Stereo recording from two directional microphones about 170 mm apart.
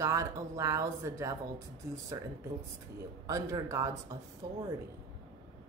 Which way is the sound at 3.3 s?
20° right (ahead or behind).